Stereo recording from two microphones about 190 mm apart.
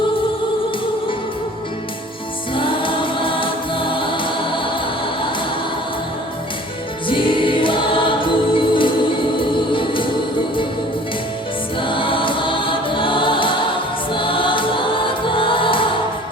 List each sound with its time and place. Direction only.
2.6 s music: 25° left (ahead or behind)
7.1 s music: 25° left (ahead or behind)
11.8 s choir: 25° left (ahead or behind)
14.1 s music: 25° left (ahead or behind)